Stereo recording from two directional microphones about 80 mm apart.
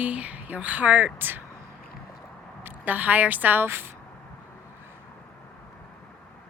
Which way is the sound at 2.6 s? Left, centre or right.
Right.